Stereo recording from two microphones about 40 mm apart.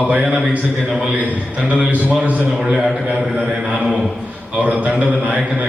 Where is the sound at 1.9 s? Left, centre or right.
Right.